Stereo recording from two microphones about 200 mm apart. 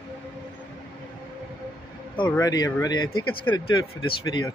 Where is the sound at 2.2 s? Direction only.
15° left (ahead or behind).